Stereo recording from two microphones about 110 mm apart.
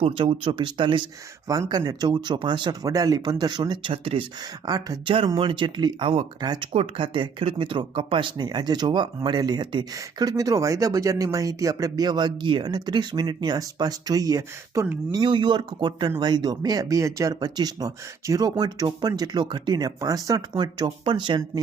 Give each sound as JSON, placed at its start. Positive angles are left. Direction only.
{"t": 0.0, "sound": "speech", "side_deg": -55}
{"t": 1.5, "sound": "speech", "side_deg": -35}
{"t": 3.9, "sound": "speech", "side_deg": -55}
{"t": 4.6, "sound": "speech", "side_deg": -35}
{"t": 5.0, "sound": "speech", "side_deg": -50}
{"t": 6.7, "sound": "speech", "side_deg": -50}
{"t": 15.1, "sound": "speech", "side_deg": -45}
{"t": 20.5, "sound": "speech", "side_deg": -45}